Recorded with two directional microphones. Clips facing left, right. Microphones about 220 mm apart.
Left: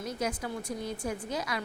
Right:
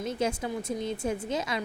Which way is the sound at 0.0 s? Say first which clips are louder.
Right 4 dB; 25° right (ahead or behind).